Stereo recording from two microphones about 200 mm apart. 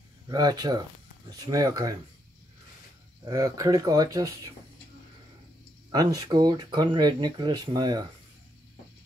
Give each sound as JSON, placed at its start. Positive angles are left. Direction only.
{"t": 0.3, "sound": "speech", "side_deg": -20}
{"t": 3.3, "sound": "speech", "side_deg": -15}
{"t": 5.9, "sound": "speech", "side_deg": -20}